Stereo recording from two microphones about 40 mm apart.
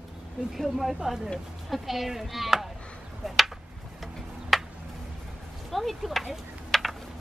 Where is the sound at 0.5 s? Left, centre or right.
Centre.